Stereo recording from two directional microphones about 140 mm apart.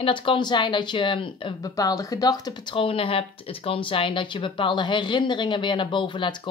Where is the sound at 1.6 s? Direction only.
25° left (ahead or behind).